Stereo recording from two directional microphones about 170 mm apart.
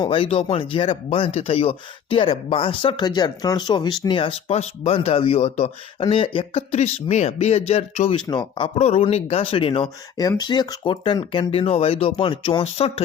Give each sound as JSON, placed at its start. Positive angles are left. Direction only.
{"t": 0.0, "sound": "speech", "side_deg": 30}